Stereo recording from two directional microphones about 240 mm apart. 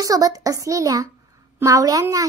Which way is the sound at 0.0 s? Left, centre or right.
Centre.